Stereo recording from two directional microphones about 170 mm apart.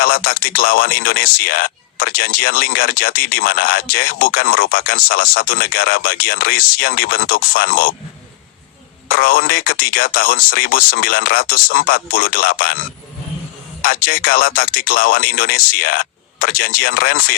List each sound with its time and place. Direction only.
0.0 s speech: 60° left (ahead or behind)
9.0 s speech: 60° left (ahead or behind)
13.8 s speech: 60° left (ahead or behind)